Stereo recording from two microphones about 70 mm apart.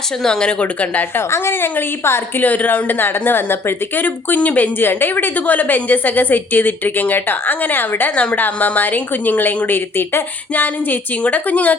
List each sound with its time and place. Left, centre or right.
0.2 s speech: centre
1.3 s a woman's voice: left
2.4 s speech: left